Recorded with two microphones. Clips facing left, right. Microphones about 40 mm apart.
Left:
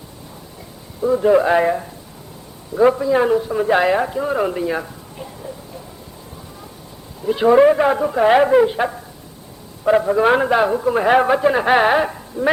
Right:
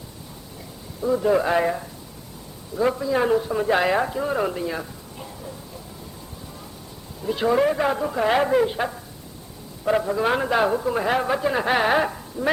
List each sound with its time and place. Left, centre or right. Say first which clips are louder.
1.0 s a man's voice: left 6 dB; centre
5.1 s a sound: left 4 dB; centre
7.2 s a man's voice: left 8 dB; centre
10.6 s a man's voice: left 4 dB; centre
10.9 s a man's voice: left 8 dB; left
11.9 s speech: left 4 dB; centre